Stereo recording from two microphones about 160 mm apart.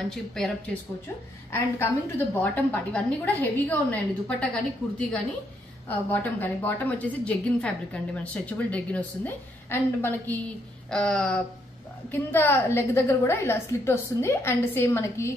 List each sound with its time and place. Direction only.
0.1 s speech: centre (ahead or behind)
1.5 s a woman's voice: 15° left (ahead or behind)
5.9 s a woman's voice: 10° left (ahead or behind)